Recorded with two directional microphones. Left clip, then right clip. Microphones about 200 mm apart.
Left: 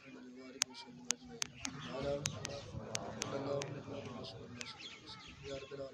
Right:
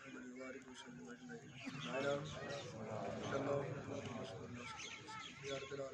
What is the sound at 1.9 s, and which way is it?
Speech, 50° right (ahead or behind).